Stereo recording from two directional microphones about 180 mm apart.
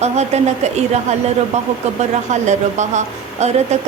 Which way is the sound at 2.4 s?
40° right (ahead or behind).